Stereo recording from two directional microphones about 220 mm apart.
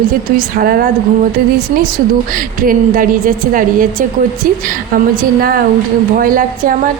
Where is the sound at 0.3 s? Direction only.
40° right (ahead or behind).